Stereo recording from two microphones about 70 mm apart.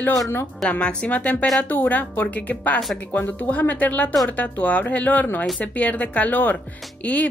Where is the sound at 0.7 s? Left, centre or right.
Centre.